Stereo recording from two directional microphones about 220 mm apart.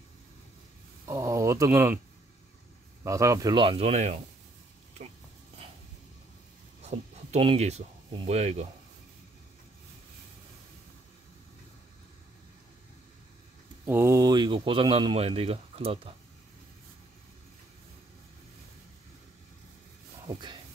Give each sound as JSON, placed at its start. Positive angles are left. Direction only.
{"t": 1.0, "sound": "speech", "side_deg": -15}
{"t": 3.0, "sound": "speech", "side_deg": -15}
{"t": 6.8, "sound": "speech", "side_deg": -30}
{"t": 13.8, "sound": "speech", "side_deg": -10}
{"t": 20.2, "sound": "speech", "side_deg": -20}